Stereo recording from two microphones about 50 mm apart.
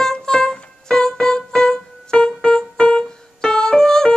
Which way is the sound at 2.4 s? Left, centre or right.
Centre.